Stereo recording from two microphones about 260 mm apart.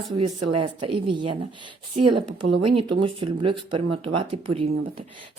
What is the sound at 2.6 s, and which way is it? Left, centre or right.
Speech, right.